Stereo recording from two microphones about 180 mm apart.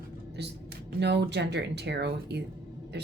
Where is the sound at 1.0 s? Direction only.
70° right (ahead or behind).